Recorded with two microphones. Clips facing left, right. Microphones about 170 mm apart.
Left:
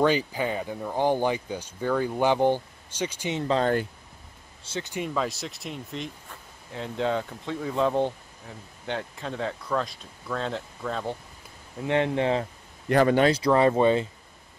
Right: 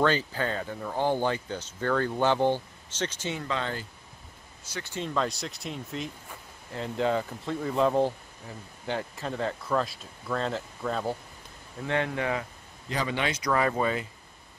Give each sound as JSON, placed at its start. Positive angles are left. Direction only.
{"t": 0.0, "sound": "speech", "side_deg": 15}
{"t": 3.3, "sound": "speech", "side_deg": 35}
{"t": 4.6, "sound": "speech", "side_deg": 20}
{"t": 11.8, "sound": "speech", "side_deg": 20}
{"t": 12.8, "sound": "a man's voice", "side_deg": 55}
{"t": 13.2, "sound": "speech", "side_deg": 30}